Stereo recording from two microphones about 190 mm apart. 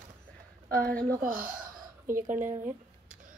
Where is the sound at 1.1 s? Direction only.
45° right (ahead or behind).